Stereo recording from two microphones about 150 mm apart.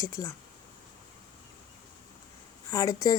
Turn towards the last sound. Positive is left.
turn(degrees=25)  # may be behind; listen again after turning